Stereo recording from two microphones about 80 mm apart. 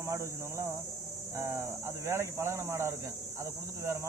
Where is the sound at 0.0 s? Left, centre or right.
Right.